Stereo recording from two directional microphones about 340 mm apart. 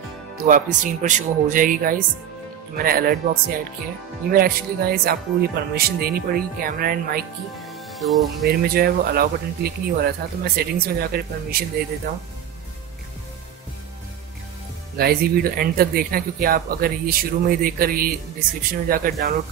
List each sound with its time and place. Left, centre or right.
0.5 s speech: right
7.6 s music: centre
8.5 s speech: right
15.0 s speech: right